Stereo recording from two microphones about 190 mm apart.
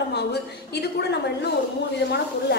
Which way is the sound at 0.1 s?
60° left (ahead or behind).